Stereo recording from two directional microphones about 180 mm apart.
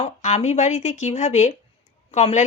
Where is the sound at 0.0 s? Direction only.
40° left (ahead or behind).